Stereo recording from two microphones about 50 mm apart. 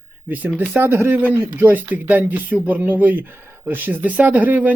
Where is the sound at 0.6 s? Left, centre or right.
Right.